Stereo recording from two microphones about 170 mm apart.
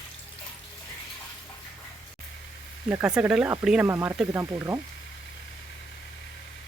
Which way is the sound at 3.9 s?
15° right (ahead or behind).